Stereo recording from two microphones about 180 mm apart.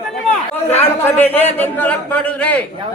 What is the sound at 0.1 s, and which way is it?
Chatter, 5° left (ahead or behind).